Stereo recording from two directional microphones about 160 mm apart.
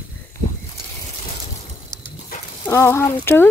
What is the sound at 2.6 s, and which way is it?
Speech, 15° left (ahead or behind).